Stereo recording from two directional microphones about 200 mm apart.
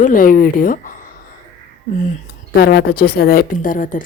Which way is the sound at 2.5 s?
50° left (ahead or behind).